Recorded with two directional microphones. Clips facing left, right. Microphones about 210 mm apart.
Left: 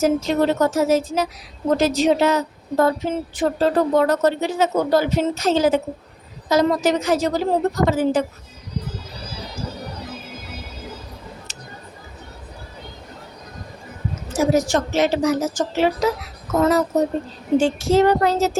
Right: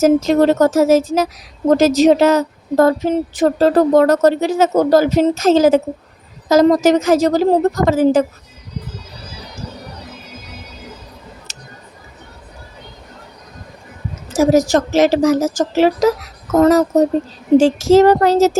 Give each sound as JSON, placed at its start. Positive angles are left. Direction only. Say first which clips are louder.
{"t": 0.0, "sound": "speech", "louder": "right 6 dB", "side_deg": -40}
{"t": 14.3, "sound": "speech", "louder": "right 6 dB", "side_deg": -40}
{"t": 14.9, "sound": "a woman's voice", "louder": "right 6 dB", "side_deg": -90}
{"t": 15.2, "sound": "a child's voice", "louder": "right 6 dB", "side_deg": -45}
{"t": 17.9, "sound": "speech", "louder": "right 6 dB", "side_deg": -40}